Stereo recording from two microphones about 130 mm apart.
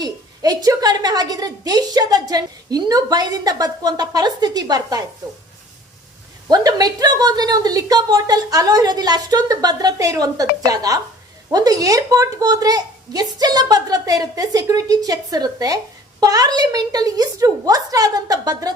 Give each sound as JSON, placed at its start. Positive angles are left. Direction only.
{"t": 0.0, "sound": "a woman's voice", "side_deg": -30}
{"t": 6.5, "sound": "a woman's voice", "side_deg": -30}